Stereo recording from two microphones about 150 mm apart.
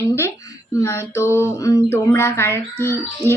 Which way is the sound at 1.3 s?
20° left (ahead or behind).